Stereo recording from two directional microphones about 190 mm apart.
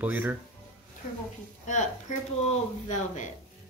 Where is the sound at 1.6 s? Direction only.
40° left (ahead or behind).